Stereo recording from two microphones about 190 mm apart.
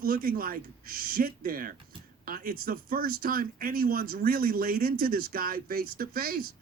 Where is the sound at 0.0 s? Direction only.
50° right (ahead or behind).